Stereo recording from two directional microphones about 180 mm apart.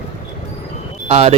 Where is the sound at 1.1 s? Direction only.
35° right (ahead or behind).